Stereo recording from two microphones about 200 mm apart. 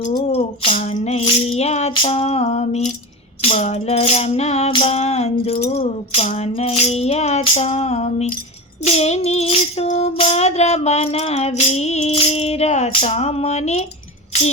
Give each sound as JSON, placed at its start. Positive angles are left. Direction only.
{"t": 0.3, "sound": "music", "side_deg": 30}